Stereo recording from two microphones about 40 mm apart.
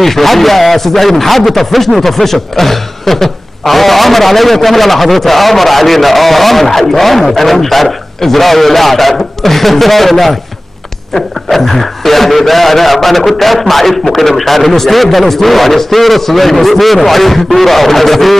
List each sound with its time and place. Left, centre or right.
0.0 s a man's voice: centre